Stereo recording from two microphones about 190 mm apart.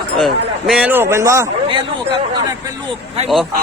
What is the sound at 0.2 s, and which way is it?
A man's voice, centre (ahead or behind).